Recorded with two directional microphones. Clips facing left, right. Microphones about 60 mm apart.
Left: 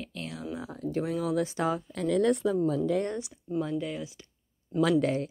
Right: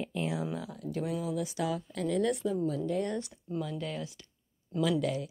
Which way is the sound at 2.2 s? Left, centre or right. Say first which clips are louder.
Left 6 dB; left.